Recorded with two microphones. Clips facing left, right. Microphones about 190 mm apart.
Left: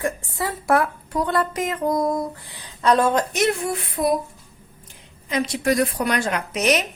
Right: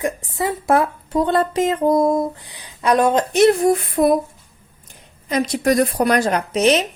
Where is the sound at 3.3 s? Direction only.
35° right (ahead or behind); by 4.2 s 50° right (ahead or behind).